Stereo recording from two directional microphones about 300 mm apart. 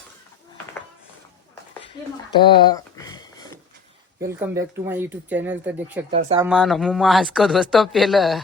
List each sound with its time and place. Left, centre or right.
2.4 s a sound: centre
4.3 s speech: centre
6.1 s speech: centre
6.4 s speech: centre